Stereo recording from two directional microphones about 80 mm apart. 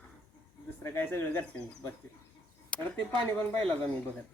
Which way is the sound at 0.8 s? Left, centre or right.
Left.